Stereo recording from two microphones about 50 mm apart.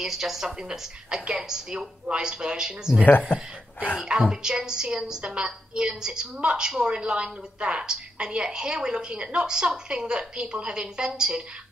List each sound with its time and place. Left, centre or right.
0.0 s a woman's voice: centre
3.1 s speech: left
4.0 s a woman's voice: centre